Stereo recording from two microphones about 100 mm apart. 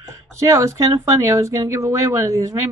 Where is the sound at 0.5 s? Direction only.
30° right (ahead or behind).